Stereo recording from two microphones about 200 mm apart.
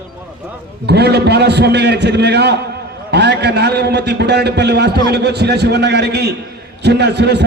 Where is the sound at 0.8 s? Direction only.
55° right (ahead or behind).